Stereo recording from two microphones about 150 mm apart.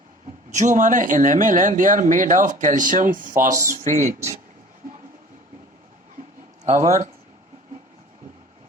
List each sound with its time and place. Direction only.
0.5 s speech: 55° right (ahead or behind)
3.7 s speech: 50° right (ahead or behind)
6.7 s speech: 55° right (ahead or behind)